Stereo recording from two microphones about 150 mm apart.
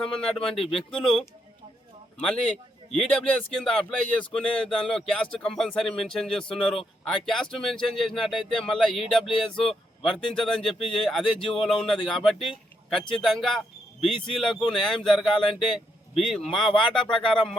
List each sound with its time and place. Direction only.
0.5 s speech: 40° left (ahead or behind)
0.9 s a man's voice: 5° left (ahead or behind)